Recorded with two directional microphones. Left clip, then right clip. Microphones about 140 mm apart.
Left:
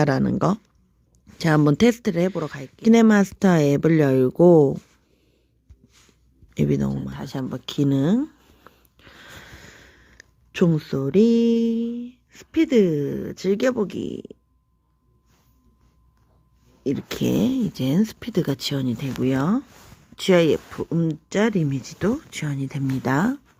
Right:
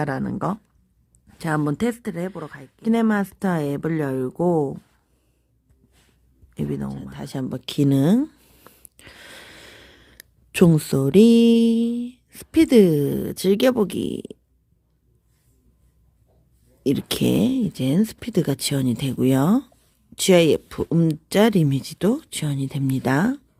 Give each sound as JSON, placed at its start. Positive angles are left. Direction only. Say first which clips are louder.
{"t": 0.0, "sound": "speech", "louder": "left 4 dB", "side_deg": 40}
{"t": 6.5, "sound": "speech", "louder": "left 6 dB", "side_deg": 35}
{"t": 7.1, "sound": "speech", "louder": "even", "side_deg": -5}
{"t": 16.8, "sound": "speech", "louder": "right 3 dB", "side_deg": -20}